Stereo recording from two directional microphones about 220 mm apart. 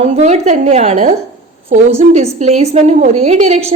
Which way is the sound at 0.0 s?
30° right (ahead or behind).